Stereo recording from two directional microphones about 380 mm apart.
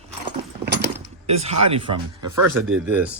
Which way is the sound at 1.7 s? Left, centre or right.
Centre.